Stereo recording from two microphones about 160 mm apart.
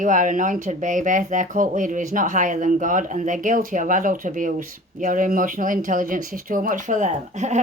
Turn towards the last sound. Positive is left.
turn(degrees=-45)  # may be behind; listen again after turning